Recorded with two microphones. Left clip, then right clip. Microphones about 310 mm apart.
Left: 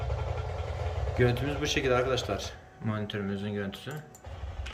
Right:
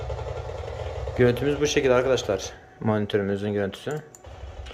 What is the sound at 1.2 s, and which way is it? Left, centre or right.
A man's voice, centre.